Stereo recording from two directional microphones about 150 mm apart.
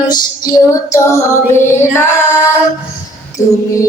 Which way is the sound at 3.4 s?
20° left (ahead or behind).